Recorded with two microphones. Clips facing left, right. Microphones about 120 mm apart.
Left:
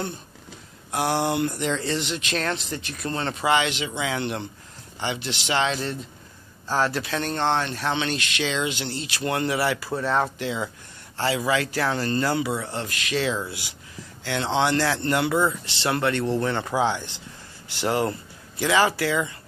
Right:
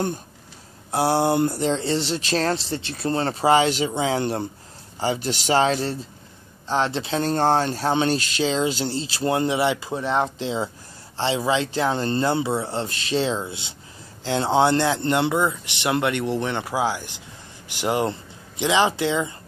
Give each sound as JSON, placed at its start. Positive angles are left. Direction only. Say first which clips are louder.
{"t": 0.9, "sound": "speech", "louder": "right 4 dB", "side_deg": -30}
{"t": 6.7, "sound": "speech", "louder": "right 1 dB", "side_deg": -25}
{"t": 7.3, "sound": "speech", "louder": "right 4 dB", "side_deg": -40}